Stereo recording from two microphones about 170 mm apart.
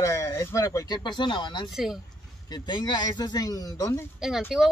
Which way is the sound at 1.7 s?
Centre (ahead or behind).